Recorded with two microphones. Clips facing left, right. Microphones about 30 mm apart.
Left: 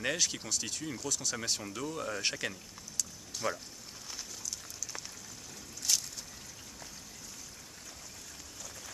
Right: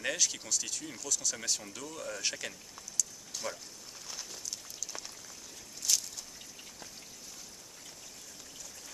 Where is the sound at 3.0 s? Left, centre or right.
Left.